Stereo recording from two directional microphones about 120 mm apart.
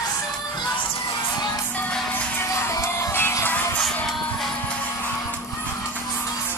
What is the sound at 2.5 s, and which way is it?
Music, 20° left (ahead or behind).